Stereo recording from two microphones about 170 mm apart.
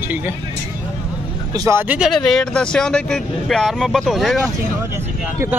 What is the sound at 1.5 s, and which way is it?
Speech, 20° right (ahead or behind).